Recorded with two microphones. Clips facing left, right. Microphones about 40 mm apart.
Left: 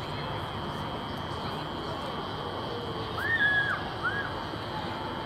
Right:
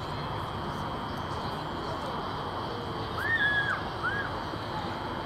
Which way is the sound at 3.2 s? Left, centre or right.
Centre.